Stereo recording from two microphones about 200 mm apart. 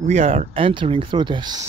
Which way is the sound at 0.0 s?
35° right (ahead or behind).